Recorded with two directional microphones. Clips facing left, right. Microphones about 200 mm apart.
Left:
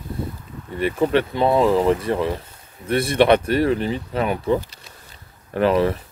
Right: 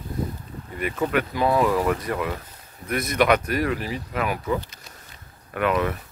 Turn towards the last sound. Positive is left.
turn(degrees=30)  # may be behind; listen again after turning